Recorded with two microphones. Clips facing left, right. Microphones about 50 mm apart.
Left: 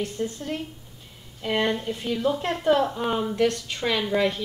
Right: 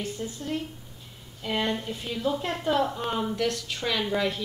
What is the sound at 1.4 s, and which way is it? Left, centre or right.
A woman's voice, left.